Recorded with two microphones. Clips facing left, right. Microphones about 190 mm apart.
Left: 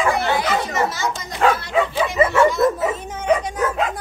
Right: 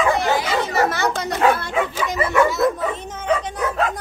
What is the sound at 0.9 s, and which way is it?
Speech, 60° right (ahead or behind).